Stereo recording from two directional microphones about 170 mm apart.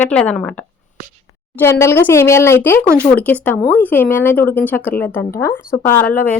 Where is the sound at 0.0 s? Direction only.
10° left (ahead or behind).